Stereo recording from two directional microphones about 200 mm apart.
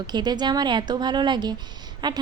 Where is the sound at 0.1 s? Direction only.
20° right (ahead or behind).